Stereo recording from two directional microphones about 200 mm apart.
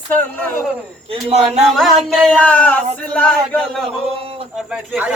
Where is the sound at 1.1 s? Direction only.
30° right (ahead or behind).